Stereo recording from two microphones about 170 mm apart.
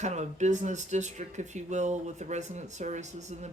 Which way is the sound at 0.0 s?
40° right (ahead or behind).